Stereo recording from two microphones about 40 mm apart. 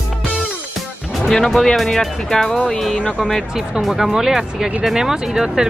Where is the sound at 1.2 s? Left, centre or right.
Centre.